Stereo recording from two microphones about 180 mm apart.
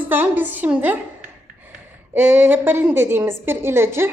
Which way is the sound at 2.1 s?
10° right (ahead or behind).